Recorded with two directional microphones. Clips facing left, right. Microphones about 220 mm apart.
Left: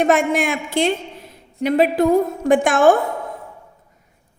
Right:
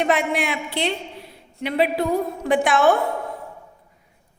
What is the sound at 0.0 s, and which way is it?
A woman's voice, 45° left (ahead or behind).